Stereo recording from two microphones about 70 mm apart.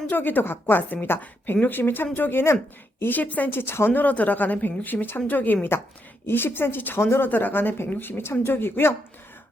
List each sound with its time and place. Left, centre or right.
0.1 s a woman's voice: left